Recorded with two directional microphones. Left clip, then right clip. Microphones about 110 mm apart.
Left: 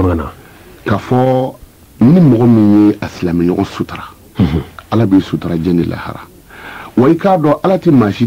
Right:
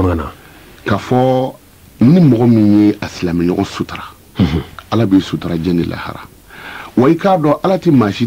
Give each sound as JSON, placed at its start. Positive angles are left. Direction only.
{"t": 0.0, "sound": "speech", "side_deg": -30}